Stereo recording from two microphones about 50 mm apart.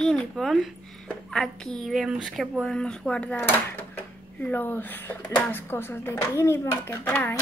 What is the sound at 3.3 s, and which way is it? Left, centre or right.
Speech, left.